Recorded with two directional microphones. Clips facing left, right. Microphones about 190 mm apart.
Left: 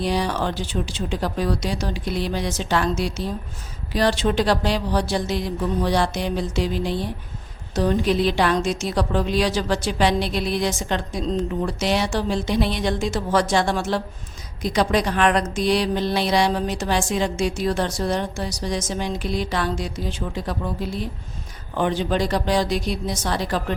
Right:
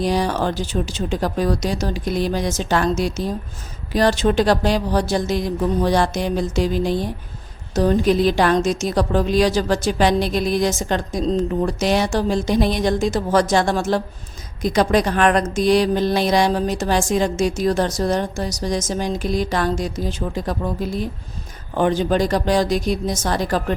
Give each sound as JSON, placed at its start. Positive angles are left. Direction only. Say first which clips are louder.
{"t": 0.0, "sound": "a woman's voice", "louder": "right 3 dB", "side_deg": -45}